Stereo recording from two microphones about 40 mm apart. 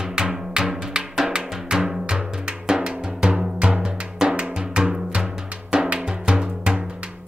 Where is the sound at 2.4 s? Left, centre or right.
Right.